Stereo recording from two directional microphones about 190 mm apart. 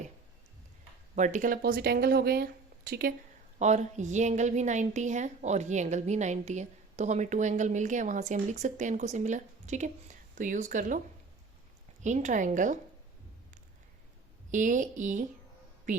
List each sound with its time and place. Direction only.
1.1 s speech: 40° right (ahead or behind)
3.6 s a woman's voice: 40° right (ahead or behind)
12.0 s a woman's voice: 40° right (ahead or behind)
14.5 s a woman's voice: 40° right (ahead or behind)